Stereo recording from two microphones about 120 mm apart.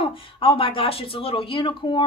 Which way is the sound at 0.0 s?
50° left (ahead or behind).